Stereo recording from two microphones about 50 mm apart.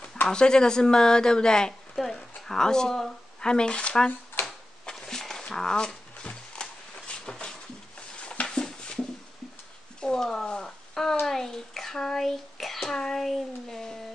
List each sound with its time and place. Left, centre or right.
0.3 s speech: centre
4.5 s a sound: centre
9.9 s a child's voice: centre